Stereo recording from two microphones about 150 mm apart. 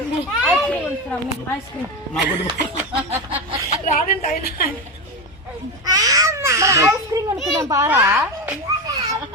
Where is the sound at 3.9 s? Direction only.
65° left (ahead or behind); by 4.6 s 85° left.